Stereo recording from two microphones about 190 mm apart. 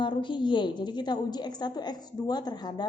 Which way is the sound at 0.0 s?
25° left (ahead or behind).